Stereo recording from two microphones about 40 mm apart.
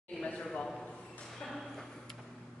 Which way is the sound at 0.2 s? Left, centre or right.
Left.